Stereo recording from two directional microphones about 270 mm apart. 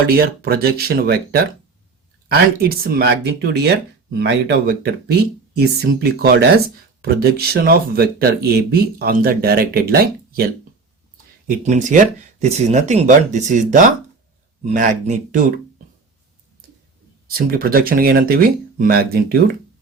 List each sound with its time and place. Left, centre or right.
0.2 s speech: right
17.2 s speech: right